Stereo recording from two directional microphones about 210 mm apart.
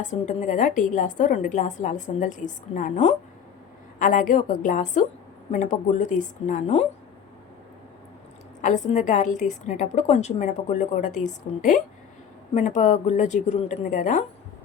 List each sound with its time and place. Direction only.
0.0 s a woman's voice: 35° left (ahead or behind)
8.6 s a woman's voice: 35° left (ahead or behind)